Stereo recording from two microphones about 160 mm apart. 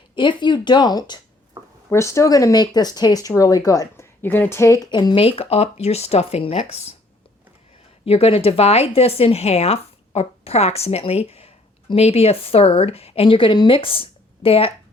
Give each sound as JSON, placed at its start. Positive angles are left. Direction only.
{"t": 0.2, "sound": "speech", "side_deg": 30}
{"t": 1.6, "sound": "a sound", "side_deg": -20}
{"t": 1.9, "sound": "speech", "side_deg": 20}
{"t": 8.0, "sound": "speech", "side_deg": 40}